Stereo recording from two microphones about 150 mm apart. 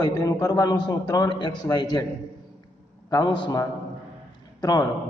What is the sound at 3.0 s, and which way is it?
Speech, 25° left (ahead or behind).